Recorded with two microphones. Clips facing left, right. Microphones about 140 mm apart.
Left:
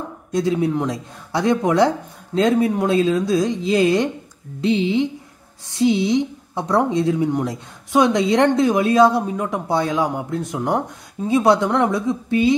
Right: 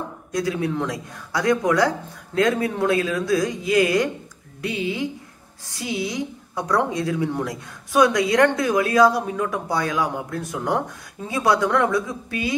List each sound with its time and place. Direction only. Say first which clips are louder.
0.3 s a woman's voice: left 5 dB; 25° left (ahead or behind)